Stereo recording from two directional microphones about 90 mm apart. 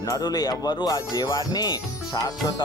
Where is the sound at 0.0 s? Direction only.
45° left (ahead or behind).